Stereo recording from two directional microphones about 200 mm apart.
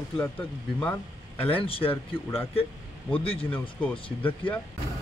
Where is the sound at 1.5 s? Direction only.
30° left (ahead or behind).